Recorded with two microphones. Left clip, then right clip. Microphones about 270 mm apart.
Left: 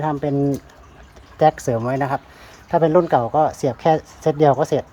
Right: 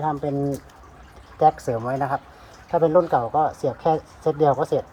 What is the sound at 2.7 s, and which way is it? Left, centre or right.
Speech, left.